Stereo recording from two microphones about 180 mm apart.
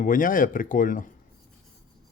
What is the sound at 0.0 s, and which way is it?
Speech, 50° left (ahead or behind).